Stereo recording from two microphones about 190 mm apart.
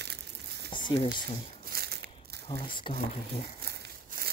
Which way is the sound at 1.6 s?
55° right (ahead or behind).